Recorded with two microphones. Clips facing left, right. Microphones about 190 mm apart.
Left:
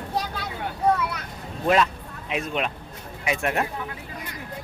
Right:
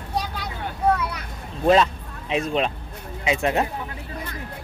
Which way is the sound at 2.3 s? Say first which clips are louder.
Right 4 dB; 30° right (ahead or behind).